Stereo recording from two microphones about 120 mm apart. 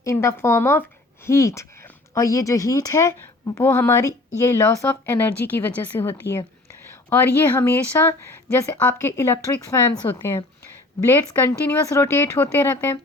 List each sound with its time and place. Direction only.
0.0 s speech: 25° left (ahead or behind)